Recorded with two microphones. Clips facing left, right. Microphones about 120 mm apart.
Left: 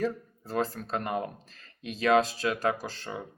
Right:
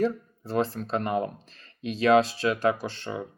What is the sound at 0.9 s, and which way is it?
Speech, 40° right (ahead or behind).